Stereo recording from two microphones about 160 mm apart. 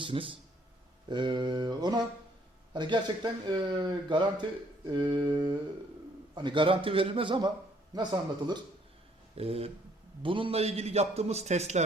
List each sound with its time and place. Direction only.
0.0 s a man's voice: 35° right (ahead or behind)
9.3 s a sound: 40° right (ahead or behind)
10.2 s a man's voice: 35° right (ahead or behind)